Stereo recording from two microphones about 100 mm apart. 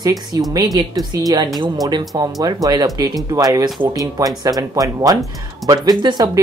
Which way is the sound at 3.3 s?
30° right (ahead or behind).